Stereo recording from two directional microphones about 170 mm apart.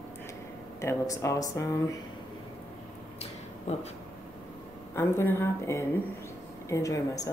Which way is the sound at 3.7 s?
40° left (ahead or behind).